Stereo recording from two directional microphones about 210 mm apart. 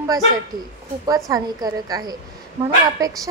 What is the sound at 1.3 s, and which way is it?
Speech, 20° right (ahead or behind).